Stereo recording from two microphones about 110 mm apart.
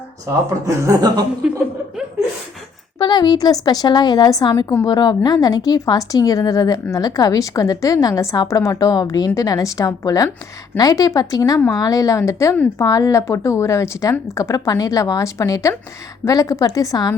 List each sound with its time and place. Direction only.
0.3 s speech: 30° right (ahead or behind)
3.0 s a woman's voice: 40° left (ahead or behind)
4.9 s a woman's voice: 40° left (ahead or behind)